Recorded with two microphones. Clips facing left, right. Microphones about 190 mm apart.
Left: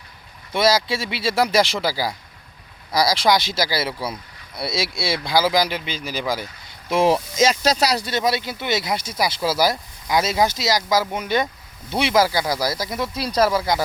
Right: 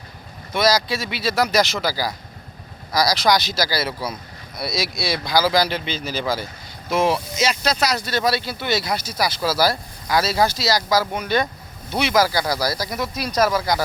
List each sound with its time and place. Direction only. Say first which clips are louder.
0.5 s speech: even; 25° left (ahead or behind)
6.9 s speech: left 2 dB; 35° left (ahead or behind)
8.1 s speech: even; 20° left (ahead or behind)